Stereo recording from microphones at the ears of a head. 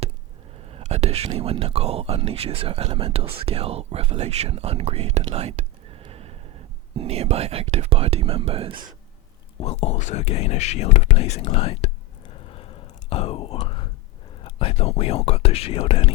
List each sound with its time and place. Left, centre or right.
0.7 s speech: right
9.6 s speech: left
12.3 s a sound: left
14.4 s speech: left